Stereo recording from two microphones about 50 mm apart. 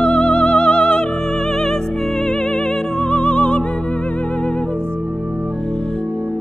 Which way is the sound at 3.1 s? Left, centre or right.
Left.